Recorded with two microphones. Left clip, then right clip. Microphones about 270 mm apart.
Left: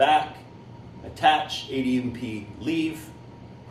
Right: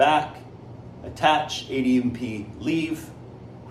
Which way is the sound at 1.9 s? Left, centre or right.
Right.